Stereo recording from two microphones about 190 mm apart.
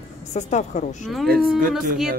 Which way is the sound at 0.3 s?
35° left (ahead or behind).